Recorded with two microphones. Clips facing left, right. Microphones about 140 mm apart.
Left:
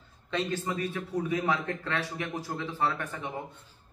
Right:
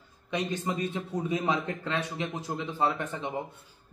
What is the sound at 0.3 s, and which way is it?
A man's voice, 15° right (ahead or behind).